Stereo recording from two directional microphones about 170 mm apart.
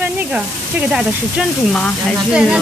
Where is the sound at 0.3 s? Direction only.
5° right (ahead or behind).